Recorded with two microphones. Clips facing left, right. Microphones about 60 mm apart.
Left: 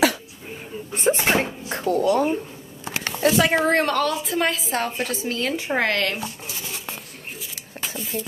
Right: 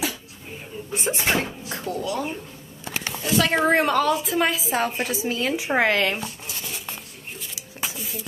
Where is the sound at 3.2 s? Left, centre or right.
Left.